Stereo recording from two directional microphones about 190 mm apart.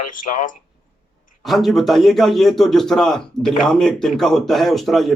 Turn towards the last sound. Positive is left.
turn(degrees=0)  # may be behind; listen again after turning